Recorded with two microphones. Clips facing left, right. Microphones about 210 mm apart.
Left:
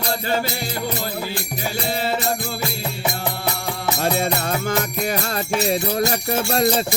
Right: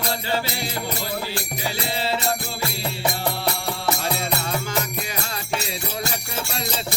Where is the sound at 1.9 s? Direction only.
50° left (ahead or behind).